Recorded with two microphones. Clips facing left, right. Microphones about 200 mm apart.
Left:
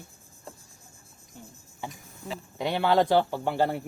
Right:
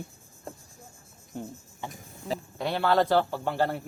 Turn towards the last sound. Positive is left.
turn(degrees=15)  # may be behind; listen again after turning